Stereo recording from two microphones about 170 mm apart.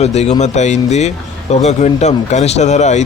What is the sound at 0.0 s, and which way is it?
Speech, 40° left (ahead or behind).